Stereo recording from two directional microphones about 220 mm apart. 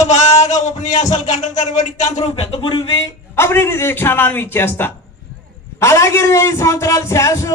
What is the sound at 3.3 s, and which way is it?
A man's voice, 10° left (ahead or behind).